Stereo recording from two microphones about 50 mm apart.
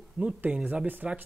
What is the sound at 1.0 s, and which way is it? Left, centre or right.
Speech, right.